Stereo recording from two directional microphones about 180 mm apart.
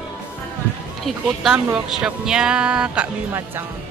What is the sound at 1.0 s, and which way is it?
Speech, centre (ahead or behind).